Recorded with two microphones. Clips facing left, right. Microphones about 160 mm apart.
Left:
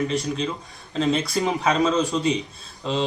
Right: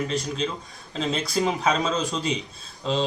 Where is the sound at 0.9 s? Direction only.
Centre (ahead or behind).